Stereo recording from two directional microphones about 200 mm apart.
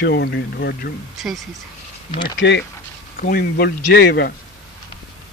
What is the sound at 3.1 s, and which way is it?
Speech, 45° left (ahead or behind).